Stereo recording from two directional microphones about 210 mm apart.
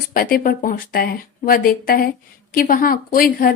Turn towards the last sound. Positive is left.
turn(degrees=45)  # may be behind; listen again after turning